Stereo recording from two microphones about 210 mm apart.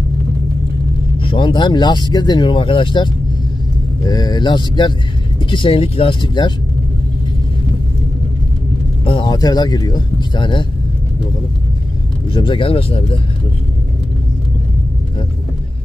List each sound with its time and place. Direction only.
1.2 s speech: 25° left (ahead or behind)
9.0 s speech: 25° left (ahead or behind)
12.3 s speech: 25° left (ahead or behind)